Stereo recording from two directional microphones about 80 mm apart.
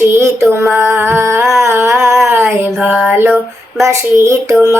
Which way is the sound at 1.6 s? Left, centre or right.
Right.